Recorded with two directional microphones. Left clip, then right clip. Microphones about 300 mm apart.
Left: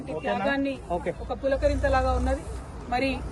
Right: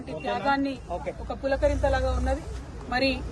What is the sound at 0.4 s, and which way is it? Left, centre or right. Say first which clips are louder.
Speech: right 3 dB; right.